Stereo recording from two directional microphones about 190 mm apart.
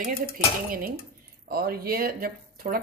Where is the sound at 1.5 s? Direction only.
50° right (ahead or behind).